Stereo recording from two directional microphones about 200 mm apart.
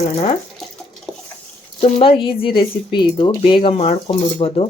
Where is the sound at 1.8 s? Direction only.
25° left (ahead or behind).